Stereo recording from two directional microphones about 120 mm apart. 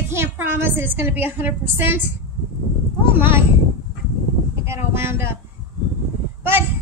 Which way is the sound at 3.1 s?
20° right (ahead or behind).